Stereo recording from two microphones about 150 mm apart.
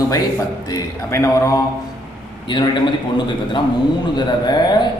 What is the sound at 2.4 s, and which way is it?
Speech, 30° left (ahead or behind).